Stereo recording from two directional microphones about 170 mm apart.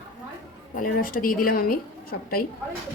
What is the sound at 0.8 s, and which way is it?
A woman's voice, 55° left (ahead or behind).